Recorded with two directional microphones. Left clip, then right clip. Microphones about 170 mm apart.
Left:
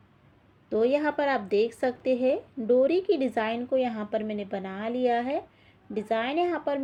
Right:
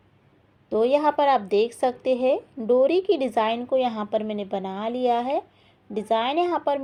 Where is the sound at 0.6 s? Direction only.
25° right (ahead or behind).